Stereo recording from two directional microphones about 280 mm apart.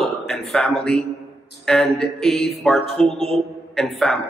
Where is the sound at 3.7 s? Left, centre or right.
Centre.